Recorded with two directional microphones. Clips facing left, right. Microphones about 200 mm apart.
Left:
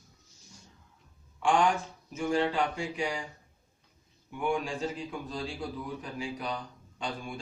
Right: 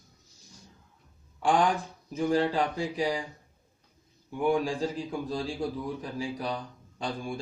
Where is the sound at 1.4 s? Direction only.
35° right (ahead or behind).